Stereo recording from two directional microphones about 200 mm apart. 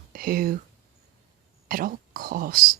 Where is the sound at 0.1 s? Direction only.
45° right (ahead or behind).